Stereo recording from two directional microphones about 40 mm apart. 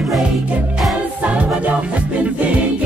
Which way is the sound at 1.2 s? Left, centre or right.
Right.